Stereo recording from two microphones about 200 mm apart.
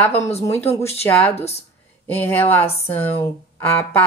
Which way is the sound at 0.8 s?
10° left (ahead or behind).